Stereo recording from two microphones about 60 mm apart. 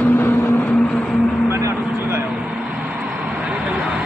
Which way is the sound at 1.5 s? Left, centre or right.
Right.